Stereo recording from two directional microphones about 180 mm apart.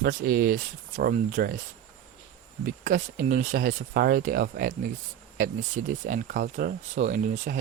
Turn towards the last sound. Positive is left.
turn(degrees=-45)  # may be behind; listen again after turning